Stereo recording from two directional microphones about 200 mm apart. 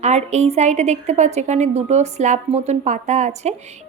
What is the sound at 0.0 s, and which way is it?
A woman's voice, 35° right (ahead or behind).